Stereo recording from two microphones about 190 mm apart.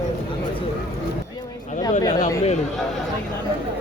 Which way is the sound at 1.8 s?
20° left (ahead or behind).